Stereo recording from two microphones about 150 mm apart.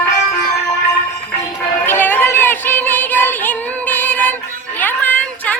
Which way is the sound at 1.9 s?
10° left (ahead or behind).